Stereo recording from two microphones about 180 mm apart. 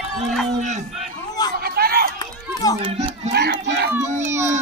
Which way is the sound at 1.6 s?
60° right (ahead or behind).